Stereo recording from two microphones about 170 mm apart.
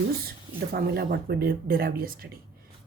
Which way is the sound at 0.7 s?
65° right (ahead or behind).